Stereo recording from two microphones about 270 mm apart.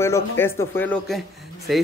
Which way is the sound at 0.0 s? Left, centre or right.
Centre.